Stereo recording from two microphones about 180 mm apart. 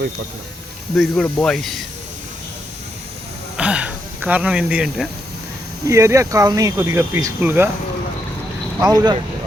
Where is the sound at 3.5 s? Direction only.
5° right (ahead or behind).